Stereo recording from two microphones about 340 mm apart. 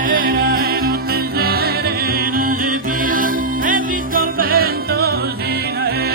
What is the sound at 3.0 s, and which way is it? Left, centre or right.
Music, right.